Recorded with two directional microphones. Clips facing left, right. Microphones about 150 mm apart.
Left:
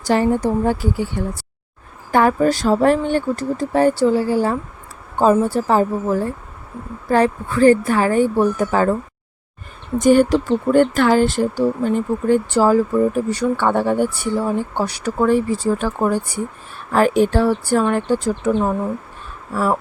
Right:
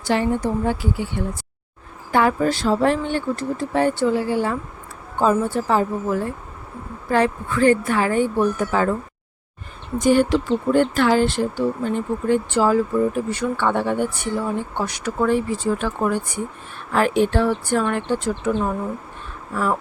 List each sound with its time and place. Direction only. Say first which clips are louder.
0.0 s speech: left 4 dB; 40° left (ahead or behind)
10.0 s speech: left 3 dB; 45° left (ahead or behind)